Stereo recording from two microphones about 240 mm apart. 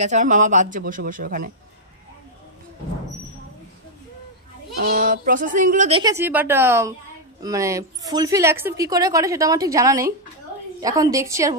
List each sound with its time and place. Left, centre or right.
0.0 s speech: right
4.7 s speech: right
6.1 s a woman's voice: centre